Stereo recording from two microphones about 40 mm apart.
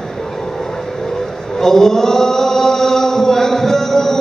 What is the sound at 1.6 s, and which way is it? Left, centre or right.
Chant, centre.